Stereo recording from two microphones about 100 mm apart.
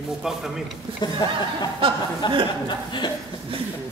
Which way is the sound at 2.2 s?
50° left (ahead or behind).